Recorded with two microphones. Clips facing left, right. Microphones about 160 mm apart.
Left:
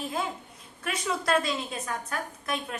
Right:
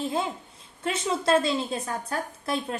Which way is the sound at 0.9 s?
25° right (ahead or behind).